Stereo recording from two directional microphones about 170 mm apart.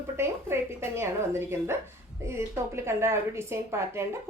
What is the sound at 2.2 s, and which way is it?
A woman's voice, 15° right (ahead or behind).